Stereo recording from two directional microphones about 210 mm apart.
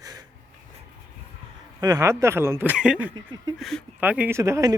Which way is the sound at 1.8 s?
15° right (ahead or behind).